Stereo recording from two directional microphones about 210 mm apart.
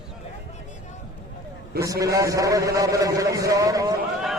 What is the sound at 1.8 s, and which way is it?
A man's voice, 15° right (ahead or behind).